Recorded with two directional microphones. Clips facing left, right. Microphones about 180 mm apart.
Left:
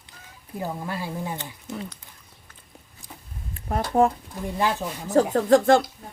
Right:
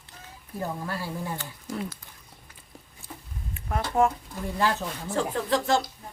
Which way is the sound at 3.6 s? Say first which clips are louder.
Left 3 dB; 35° left (ahead or behind).